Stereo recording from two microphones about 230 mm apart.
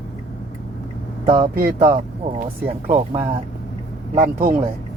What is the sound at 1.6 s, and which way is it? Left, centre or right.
Speech, right.